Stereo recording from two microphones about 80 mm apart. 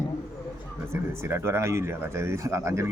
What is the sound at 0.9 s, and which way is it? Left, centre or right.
Speech, right.